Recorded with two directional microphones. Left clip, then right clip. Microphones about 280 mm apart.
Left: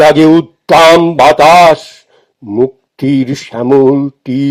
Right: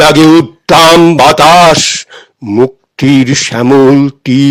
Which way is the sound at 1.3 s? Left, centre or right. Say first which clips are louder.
Left 2 dB; right.